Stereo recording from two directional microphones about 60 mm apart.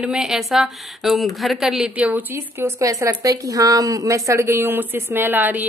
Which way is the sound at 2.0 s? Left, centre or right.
Right.